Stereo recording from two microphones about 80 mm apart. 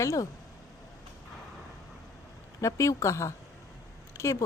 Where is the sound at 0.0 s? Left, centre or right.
Left.